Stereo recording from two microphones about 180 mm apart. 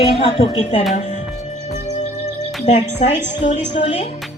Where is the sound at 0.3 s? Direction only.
35° left (ahead or behind).